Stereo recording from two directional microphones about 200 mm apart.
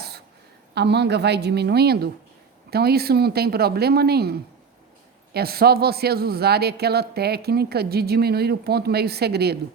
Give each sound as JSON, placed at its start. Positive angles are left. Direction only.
{"t": 0.7, "sound": "a woman's voice", "side_deg": -55}